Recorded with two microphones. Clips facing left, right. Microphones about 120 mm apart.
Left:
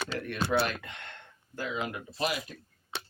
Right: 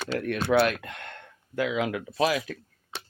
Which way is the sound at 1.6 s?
90° right.